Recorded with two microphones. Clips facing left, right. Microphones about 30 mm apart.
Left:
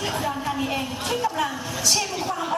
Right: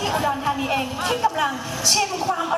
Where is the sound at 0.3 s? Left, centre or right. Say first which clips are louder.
Right 4 dB; centre.